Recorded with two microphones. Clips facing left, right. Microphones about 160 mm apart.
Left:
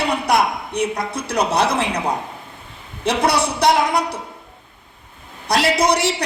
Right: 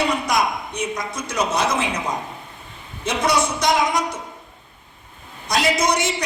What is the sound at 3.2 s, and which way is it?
Speech, 30° left (ahead or behind).